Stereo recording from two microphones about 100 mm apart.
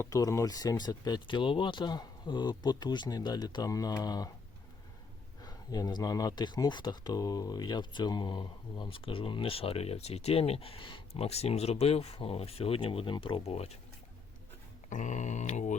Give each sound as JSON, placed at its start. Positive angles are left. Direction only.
{"t": 0.0, "sound": "speech", "side_deg": 35}
{"t": 5.4, "sound": "speech", "side_deg": 40}
{"t": 11.2, "sound": "speech", "side_deg": 90}